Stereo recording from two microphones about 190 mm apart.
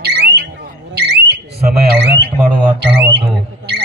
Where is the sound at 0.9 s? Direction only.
60° right (ahead or behind).